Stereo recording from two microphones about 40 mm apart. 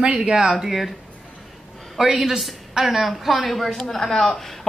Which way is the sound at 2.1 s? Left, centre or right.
Centre.